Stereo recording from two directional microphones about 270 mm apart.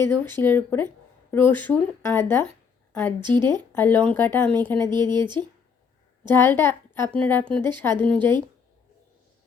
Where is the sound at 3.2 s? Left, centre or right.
Centre.